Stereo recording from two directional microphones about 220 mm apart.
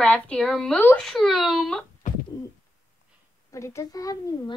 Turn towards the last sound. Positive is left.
turn(degrees=15)  # may be behind; listen again after turning